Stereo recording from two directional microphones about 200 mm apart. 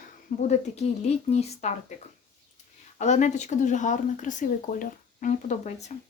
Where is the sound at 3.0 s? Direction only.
35° left (ahead or behind).